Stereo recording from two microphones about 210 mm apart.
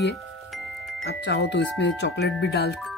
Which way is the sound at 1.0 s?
50° left (ahead or behind).